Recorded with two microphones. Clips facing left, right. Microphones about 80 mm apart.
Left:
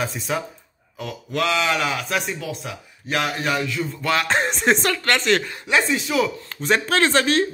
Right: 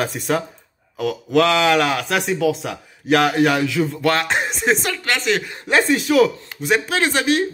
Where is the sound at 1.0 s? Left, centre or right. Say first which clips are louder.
Right 8 dB; right.